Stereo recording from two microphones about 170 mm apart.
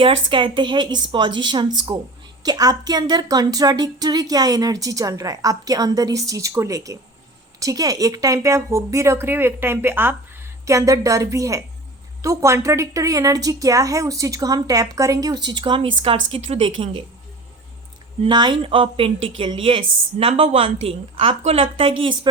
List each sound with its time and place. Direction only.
0.0 s speech: 30° right (ahead or behind)
18.2 s speech: 25° right (ahead or behind)